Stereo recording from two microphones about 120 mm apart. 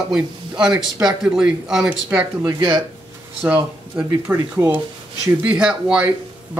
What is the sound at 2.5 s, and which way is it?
Speech, 30° right (ahead or behind).